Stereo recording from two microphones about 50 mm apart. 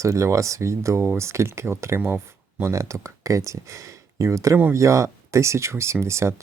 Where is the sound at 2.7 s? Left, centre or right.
Right.